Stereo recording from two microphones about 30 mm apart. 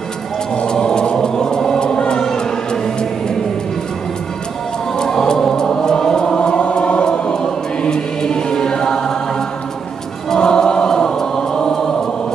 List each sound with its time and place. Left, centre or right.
0.6 s vehicle: left
1.8 s a sound: left
2.3 s music: left
5.3 s music: centre
6.6 s choir: left; by 9.1 s centre
10.3 s chant: left